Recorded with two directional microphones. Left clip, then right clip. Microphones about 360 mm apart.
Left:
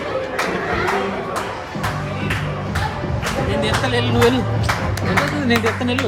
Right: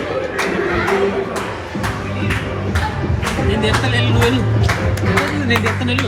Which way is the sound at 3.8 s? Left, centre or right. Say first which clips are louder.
Left 1 dB; centre.